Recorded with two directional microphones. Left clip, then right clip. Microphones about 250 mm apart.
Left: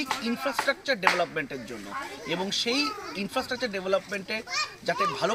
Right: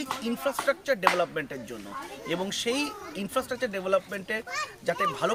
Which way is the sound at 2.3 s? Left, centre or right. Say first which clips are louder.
Left 1 dB; centre.